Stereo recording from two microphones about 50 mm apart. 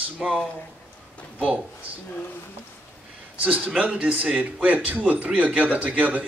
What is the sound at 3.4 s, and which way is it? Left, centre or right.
Speech, right.